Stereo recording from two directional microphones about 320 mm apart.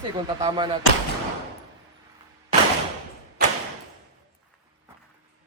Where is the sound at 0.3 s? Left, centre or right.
Centre.